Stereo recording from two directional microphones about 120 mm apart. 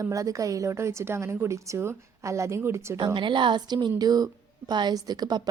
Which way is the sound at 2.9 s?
40° right (ahead or behind).